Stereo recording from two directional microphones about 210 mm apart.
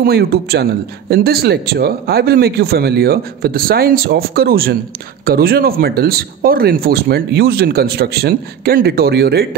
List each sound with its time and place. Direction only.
0.0 s speech: 50° right (ahead or behind)